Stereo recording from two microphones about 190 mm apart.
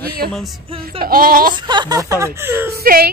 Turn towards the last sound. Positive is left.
turn(degrees=-50)  # may be behind; listen again after turning